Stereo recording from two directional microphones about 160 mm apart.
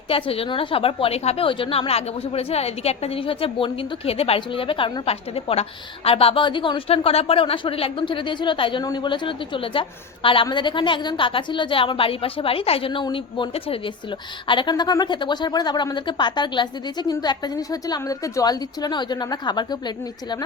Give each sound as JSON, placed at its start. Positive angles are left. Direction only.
{"t": 0.1, "sound": "a woman's voice", "side_deg": 35}